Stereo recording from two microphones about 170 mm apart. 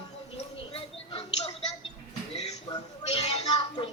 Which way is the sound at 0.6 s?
35° left (ahead or behind).